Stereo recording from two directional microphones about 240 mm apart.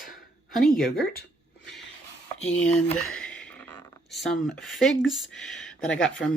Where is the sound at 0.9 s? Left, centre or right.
Left.